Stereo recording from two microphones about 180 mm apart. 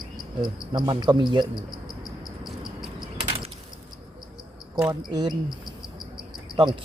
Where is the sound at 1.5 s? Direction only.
20° left (ahead or behind).